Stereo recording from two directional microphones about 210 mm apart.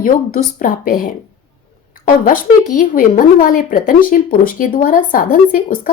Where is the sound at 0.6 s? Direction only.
40° left (ahead or behind).